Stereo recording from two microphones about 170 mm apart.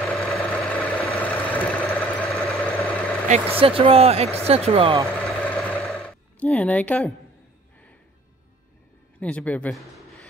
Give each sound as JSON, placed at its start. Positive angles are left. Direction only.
{"t": 0.2, "sound": "vehicle", "side_deg": 5}
{"t": 3.3, "sound": "speech", "side_deg": -35}
{"t": 5.2, "sound": "a sound", "side_deg": 5}
{"t": 9.2, "sound": "speech", "side_deg": 10}